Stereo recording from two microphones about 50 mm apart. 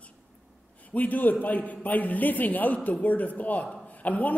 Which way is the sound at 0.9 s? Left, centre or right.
Left.